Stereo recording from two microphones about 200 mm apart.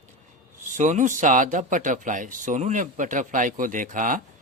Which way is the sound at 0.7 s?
35° right (ahead or behind).